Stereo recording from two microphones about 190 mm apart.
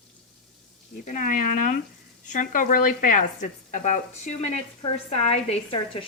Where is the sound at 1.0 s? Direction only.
40° left (ahead or behind).